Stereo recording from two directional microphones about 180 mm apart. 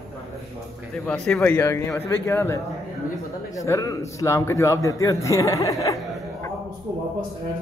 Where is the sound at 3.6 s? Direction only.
20° left (ahead or behind).